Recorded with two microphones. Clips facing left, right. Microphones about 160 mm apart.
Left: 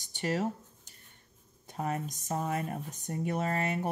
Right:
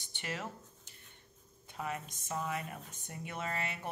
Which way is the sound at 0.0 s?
40° left (ahead or behind).